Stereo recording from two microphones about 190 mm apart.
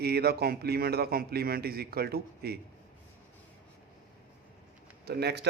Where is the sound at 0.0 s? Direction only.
55° right (ahead or behind).